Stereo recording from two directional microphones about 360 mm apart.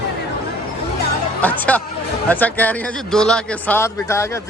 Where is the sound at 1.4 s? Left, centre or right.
Centre.